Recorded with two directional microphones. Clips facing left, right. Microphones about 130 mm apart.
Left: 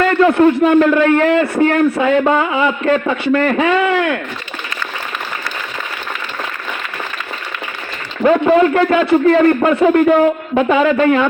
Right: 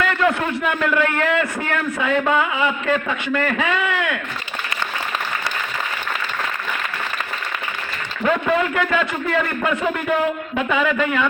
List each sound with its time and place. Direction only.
0.3 s a man's voice: 30° left (ahead or behind)
8.2 s a man's voice: 35° left (ahead or behind)